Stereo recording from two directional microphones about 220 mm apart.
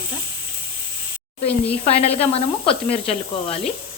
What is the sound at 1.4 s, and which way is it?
Speech, 25° left (ahead or behind).